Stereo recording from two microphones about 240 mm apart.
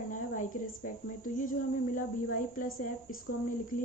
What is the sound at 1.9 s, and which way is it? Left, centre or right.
A woman's voice, left.